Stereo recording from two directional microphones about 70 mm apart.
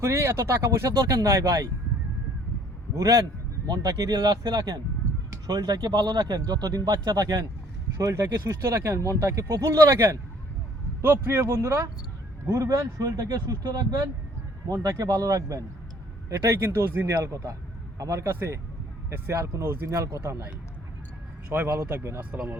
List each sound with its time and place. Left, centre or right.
0.0 s a man's voice: right
2.9 s speech: right
7.9 s a man's voice: right
11.0 s a man's voice: right
18.3 s speech: right
20.0 s a man's voice: right
21.5 s speech: right
22.2 s speech: centre